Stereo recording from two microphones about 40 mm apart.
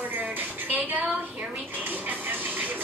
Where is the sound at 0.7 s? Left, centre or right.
Right.